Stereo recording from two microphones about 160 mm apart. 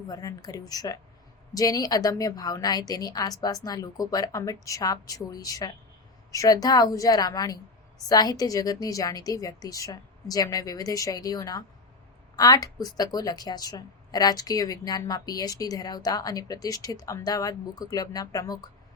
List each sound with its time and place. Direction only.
0.1 s a woman's voice: 25° left (ahead or behind)